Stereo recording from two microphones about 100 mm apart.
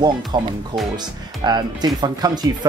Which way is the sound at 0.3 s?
50° right (ahead or behind).